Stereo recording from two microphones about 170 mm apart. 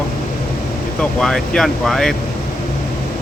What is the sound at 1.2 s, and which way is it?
Speech, 5° left (ahead or behind).